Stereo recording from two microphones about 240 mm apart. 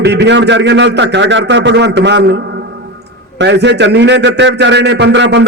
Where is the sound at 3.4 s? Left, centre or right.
Right.